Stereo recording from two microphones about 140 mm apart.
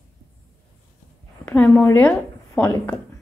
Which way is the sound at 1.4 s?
10° left (ahead or behind).